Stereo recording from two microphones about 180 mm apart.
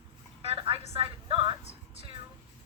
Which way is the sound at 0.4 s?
30° right (ahead or behind).